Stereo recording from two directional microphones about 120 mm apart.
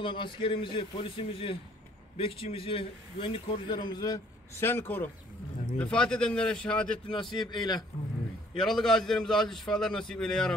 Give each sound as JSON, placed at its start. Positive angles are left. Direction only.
{"t": 0.0, "sound": "a man's voice", "side_deg": 45}
{"t": 4.6, "sound": "speech", "side_deg": 15}
{"t": 7.3, "sound": "a man's voice", "side_deg": 35}
{"t": 8.5, "sound": "a man's voice", "side_deg": 5}